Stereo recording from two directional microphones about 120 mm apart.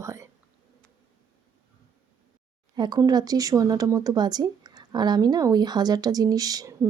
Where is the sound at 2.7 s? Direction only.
35° right (ahead or behind).